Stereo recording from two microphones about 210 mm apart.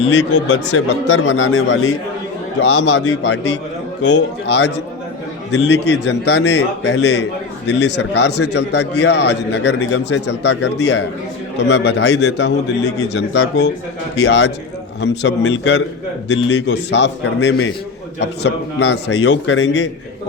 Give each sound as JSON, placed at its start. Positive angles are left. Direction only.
{"t": 0.6, "sound": "a man's voice", "side_deg": 60}
{"t": 2.6, "sound": "a man's voice", "side_deg": 60}